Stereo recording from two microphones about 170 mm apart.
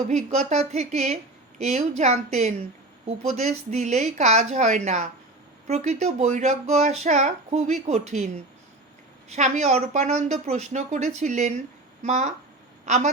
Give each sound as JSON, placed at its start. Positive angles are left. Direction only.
{"t": 0.1, "sound": "speech", "side_deg": -40}
{"t": 9.3, "sound": "a woman's voice", "side_deg": -45}